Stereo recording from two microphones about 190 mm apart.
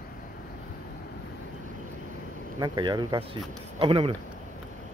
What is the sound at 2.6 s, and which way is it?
Speech, 25° right (ahead or behind).